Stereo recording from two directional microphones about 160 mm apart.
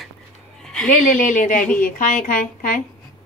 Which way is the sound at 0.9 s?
55° left (ahead or behind).